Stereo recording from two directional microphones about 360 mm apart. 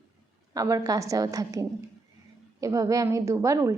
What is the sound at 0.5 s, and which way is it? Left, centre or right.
A woman's voice, centre.